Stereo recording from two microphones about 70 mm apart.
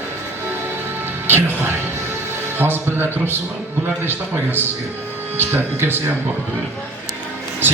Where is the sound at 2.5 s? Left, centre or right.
Right.